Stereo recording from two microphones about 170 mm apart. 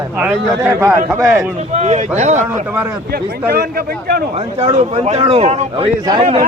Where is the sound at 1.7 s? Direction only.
45° right (ahead or behind).